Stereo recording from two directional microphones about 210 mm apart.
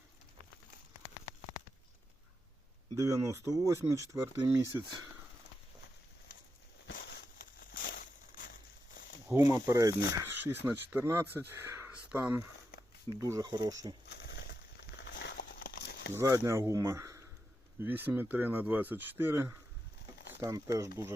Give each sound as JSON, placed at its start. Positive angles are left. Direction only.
{"t": 2.9, "sound": "speech", "side_deg": -15}
{"t": 6.8, "sound": "a sound", "side_deg": 50}
{"t": 9.2, "sound": "speech", "side_deg": -10}
{"t": 14.1, "sound": "crumpling", "side_deg": 55}
{"t": 16.1, "sound": "speech", "side_deg": -15}